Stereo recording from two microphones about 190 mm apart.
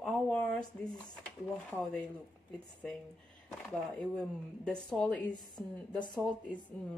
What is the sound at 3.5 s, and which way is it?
Speech, 5° left (ahead or behind).